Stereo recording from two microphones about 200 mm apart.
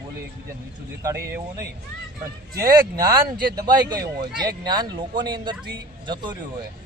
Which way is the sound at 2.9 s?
20° right (ahead or behind).